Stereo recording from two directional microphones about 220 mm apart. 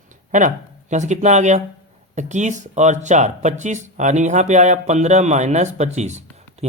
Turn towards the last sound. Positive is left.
turn(degrees=-30)  # may be behind; listen again after turning